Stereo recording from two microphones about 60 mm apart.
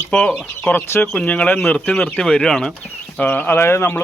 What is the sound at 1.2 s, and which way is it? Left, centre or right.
Speech, left.